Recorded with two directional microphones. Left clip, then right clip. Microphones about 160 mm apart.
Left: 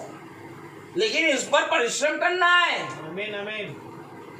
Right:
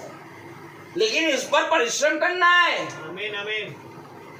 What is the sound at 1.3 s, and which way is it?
A man's voice, 20° right (ahead or behind).